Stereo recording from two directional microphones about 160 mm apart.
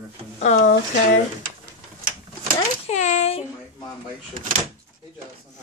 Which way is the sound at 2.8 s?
45° left (ahead or behind).